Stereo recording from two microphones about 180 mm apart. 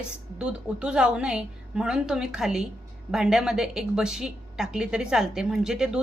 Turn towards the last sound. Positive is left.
turn(degrees=-5)  # may be behind; listen again after turning